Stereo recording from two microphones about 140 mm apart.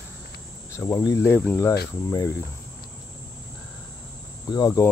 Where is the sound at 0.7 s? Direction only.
20° left (ahead or behind).